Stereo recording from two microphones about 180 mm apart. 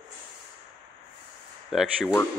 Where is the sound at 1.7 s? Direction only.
Centre (ahead or behind).